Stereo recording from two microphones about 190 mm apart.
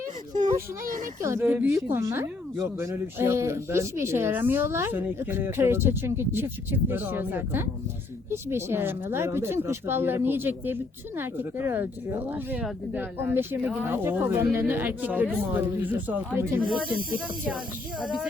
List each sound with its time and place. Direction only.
0.9 s speech: 45° right (ahead or behind)
1.2 s speech: 15° right (ahead or behind)
16.6 s speech: centre (ahead or behind)